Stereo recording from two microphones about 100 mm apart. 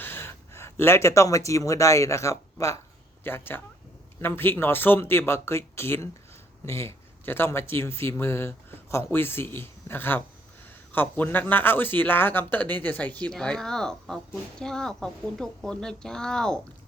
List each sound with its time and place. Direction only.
0.0 s speech: 20° left (ahead or behind)
3.2 s speech: 20° left (ahead or behind)